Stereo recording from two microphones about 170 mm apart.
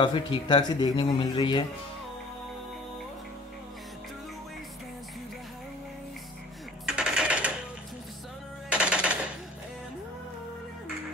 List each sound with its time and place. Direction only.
0.0 s speech: 30° left (ahead or behind)
6.9 s a sound: 5° right (ahead or behind)
8.6 s music: 5° right (ahead or behind)